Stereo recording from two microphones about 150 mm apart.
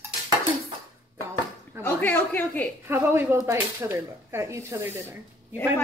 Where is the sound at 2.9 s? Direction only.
15° right (ahead or behind).